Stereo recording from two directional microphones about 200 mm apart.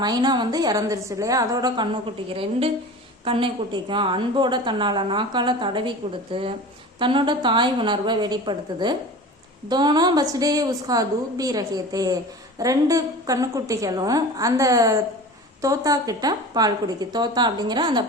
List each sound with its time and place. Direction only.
0.0 s a woman's voice: 20° right (ahead or behind)
3.2 s a woman's voice: 25° right (ahead or behind)